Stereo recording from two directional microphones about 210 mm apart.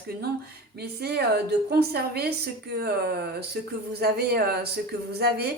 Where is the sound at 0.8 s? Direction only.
50° right (ahead or behind).